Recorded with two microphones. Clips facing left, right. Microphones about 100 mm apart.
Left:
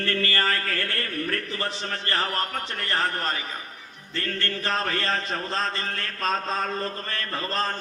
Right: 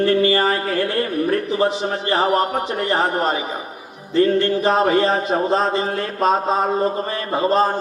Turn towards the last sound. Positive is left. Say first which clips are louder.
# right 11 dB
turn(degrees=-10)  # may be behind; listen again after turning